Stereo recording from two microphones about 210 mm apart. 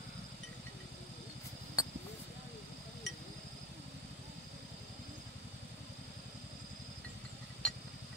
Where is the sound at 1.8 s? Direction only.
15° left (ahead or behind).